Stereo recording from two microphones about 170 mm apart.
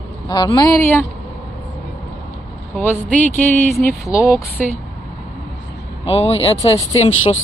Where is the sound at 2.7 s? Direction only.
10° left (ahead or behind).